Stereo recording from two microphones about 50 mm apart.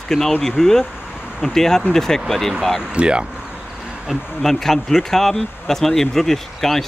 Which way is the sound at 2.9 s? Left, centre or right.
Centre.